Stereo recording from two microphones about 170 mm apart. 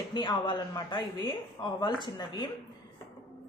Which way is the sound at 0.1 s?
25° left (ahead or behind).